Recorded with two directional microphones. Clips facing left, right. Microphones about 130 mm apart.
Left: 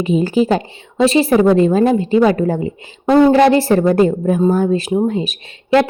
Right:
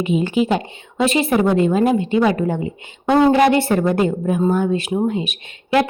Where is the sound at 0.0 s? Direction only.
35° left (ahead or behind).